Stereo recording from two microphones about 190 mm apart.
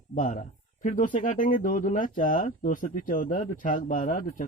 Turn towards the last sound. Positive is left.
turn(degrees=45)  # may be behind; listen again after turning